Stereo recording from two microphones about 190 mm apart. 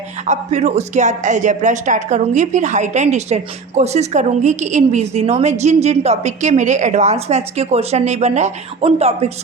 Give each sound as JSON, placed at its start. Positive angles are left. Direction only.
{"t": 0.3, "sound": "a woman's voice", "side_deg": -35}